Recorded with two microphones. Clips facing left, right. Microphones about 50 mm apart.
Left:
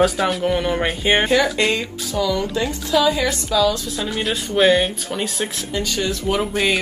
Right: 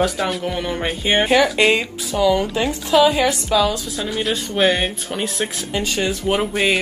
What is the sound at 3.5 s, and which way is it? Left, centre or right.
Speech, right.